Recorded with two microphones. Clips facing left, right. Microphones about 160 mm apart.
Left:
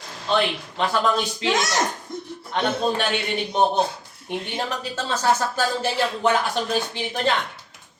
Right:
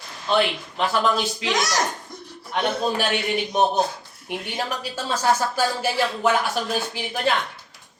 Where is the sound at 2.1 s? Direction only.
25° left (ahead or behind).